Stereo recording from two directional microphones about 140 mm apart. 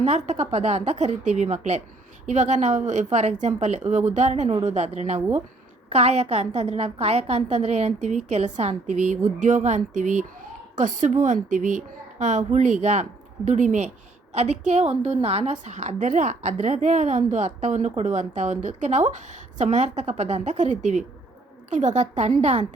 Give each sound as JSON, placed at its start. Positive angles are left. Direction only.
{"t": 0.0, "sound": "a woman's voice", "side_deg": -55}